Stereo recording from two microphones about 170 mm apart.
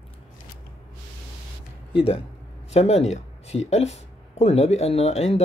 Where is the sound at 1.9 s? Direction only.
35° left (ahead or behind).